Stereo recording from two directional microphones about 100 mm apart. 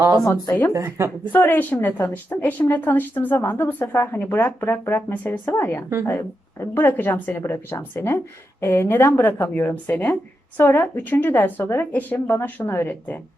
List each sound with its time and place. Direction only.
0.4 s a woman's voice: 20° left (ahead or behind)
0.7 s a woman's voice: 25° right (ahead or behind)
1.3 s a woman's voice: 20° left (ahead or behind)